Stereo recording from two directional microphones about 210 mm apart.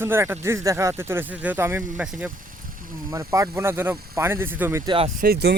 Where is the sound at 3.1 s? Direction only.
15° right (ahead or behind).